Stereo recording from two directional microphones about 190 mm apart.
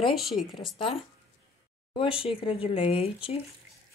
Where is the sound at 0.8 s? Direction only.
25° left (ahead or behind).